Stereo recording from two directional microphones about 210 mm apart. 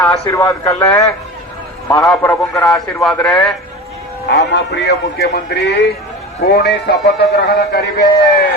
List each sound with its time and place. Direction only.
0.0 s a man's voice: 10° left (ahead or behind)
2.0 s a man's voice: centre (ahead or behind)
4.3 s a man's voice: 55° left (ahead or behind)